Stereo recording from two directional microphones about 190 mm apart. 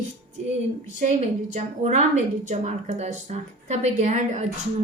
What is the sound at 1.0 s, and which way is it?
A woman's voice, 40° right (ahead or behind).